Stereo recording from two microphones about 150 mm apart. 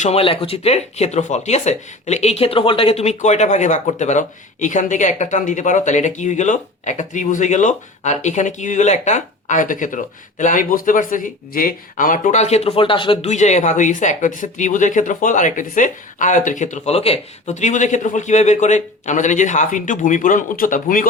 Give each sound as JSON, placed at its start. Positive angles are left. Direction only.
{"t": 0.0, "sound": "speech", "side_deg": 40}
{"t": 13.2, "sound": "speech", "side_deg": 50}